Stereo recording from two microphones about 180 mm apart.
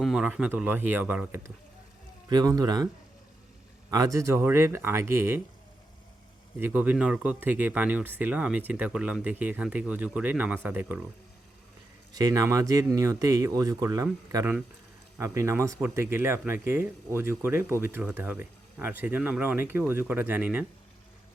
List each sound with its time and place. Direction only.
0.0 s speech: 5° right (ahead or behind)
6.6 s speech: 10° right (ahead or behind)
12.1 s speech: 20° right (ahead or behind)